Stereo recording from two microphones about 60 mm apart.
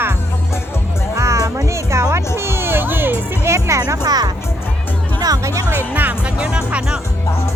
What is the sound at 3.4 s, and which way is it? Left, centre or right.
Speech, right.